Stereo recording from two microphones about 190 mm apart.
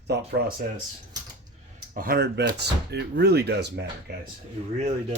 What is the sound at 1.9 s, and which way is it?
Speech, 50° right (ahead or behind).